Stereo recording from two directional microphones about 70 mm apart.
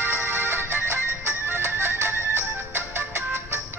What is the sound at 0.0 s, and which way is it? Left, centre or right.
Music, right.